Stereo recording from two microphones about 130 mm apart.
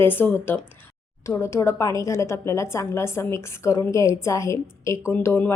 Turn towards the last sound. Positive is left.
turn(degrees=20)  # may be behind; listen again after turning